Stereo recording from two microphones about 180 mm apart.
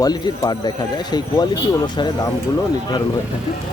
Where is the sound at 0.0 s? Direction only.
20° left (ahead or behind).